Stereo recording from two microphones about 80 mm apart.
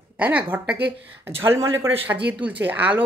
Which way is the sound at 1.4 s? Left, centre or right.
Right.